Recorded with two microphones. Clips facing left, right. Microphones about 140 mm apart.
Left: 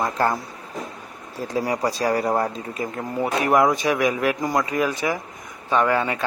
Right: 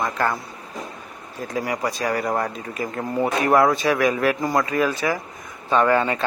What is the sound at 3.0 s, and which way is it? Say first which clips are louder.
Speech: right 2 dB; 5° left (ahead or behind).